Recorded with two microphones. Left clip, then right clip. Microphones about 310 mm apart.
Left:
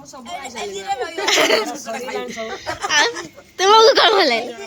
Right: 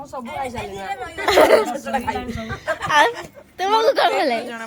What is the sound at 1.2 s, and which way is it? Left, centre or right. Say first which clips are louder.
Speech: right 3 dB; centre.